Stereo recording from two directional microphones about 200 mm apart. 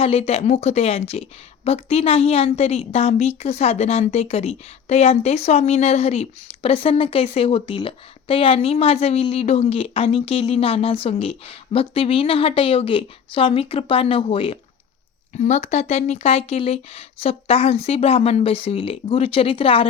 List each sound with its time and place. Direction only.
0.0 s a woman's voice: 30° left (ahead or behind)